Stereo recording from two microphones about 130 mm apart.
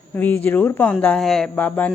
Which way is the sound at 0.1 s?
15° left (ahead or behind).